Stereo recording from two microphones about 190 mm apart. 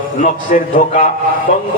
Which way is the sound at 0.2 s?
45° left (ahead or behind).